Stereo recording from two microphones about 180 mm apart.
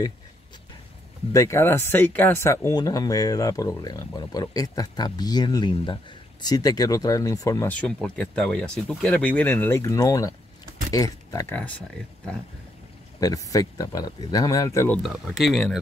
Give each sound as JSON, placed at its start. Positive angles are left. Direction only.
{"t": 1.3, "sound": "speech", "side_deg": 15}
{"t": 7.7, "sound": "speech", "side_deg": 10}
{"t": 13.2, "sound": "speech", "side_deg": 20}
{"t": 15.0, "sound": "speech", "side_deg": 0}